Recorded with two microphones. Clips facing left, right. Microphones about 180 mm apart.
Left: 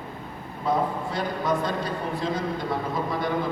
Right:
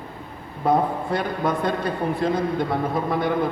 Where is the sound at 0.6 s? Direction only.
55° right (ahead or behind).